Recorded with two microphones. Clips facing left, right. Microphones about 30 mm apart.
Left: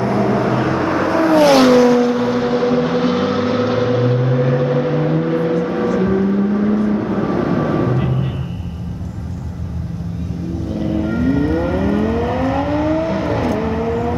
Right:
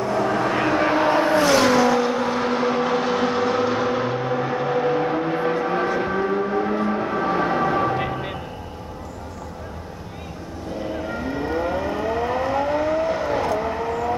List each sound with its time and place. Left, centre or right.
0.0 s vehicle: left
0.6 s vehicle: right
1.2 s vehicle: left
1.8 s vehicle: centre
10.8 s vehicle: centre